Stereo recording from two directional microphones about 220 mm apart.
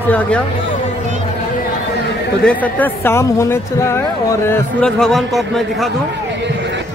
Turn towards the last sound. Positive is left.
turn(degrees=0)  # may be behind; listen again after turning